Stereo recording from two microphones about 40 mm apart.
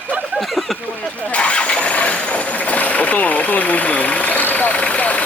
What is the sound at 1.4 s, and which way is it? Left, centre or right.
Speech, left.